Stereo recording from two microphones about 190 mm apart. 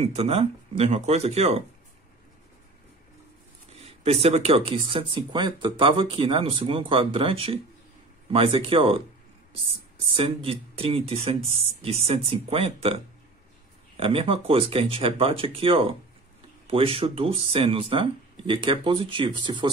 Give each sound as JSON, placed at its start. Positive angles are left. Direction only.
{"t": 0.0, "sound": "speech", "side_deg": -35}
{"t": 3.8, "sound": "speech", "side_deg": -30}
{"t": 10.1, "sound": "speech", "side_deg": -30}
{"t": 13.9, "sound": "speech", "side_deg": -30}